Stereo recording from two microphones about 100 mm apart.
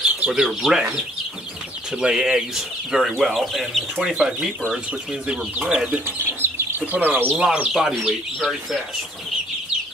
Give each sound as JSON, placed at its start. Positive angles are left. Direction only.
{"t": 0.2, "sound": "speech", "side_deg": -5}
{"t": 2.0, "sound": "speech", "side_deg": -5}
{"t": 5.6, "sound": "speech", "side_deg": -10}
{"t": 6.0, "sound": "chicken", "side_deg": -25}
{"t": 6.8, "sound": "speech", "side_deg": -15}
{"t": 7.8, "sound": "speech", "side_deg": 0}